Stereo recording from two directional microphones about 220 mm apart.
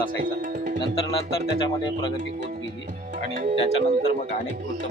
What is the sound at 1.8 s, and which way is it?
Speech, 20° left (ahead or behind).